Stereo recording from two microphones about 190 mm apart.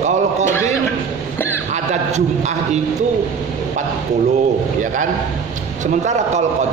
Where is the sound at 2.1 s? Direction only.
35° right (ahead or behind).